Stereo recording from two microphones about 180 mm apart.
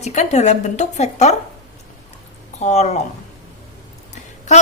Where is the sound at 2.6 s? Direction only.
40° left (ahead or behind).